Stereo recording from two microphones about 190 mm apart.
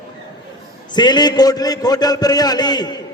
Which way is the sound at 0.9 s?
20° left (ahead or behind).